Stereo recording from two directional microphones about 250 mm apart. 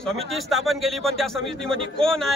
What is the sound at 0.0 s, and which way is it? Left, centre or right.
Speech, centre.